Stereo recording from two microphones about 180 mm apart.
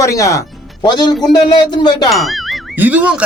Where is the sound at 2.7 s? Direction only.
10° right (ahead or behind).